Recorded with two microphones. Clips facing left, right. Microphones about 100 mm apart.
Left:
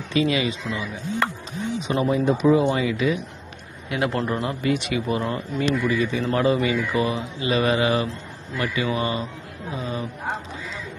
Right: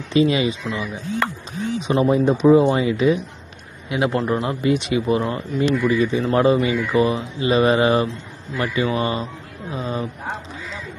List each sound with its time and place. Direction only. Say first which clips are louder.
0.1 s speech: right 4 dB; 25° right (ahead or behind)
1.9 s speech: right 4 dB; 30° right (ahead or behind)
3.9 s speech: right 4 dB; 20° right (ahead or behind)